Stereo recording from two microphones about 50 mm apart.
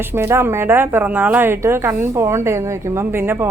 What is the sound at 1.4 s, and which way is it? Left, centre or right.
Speech, right.